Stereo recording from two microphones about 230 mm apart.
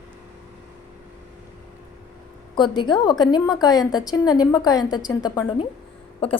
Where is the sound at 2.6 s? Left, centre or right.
Centre.